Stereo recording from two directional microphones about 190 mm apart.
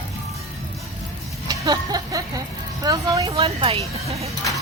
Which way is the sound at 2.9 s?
20° right (ahead or behind).